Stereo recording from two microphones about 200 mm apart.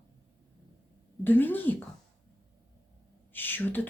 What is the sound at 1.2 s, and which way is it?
Speech, 10° left (ahead or behind).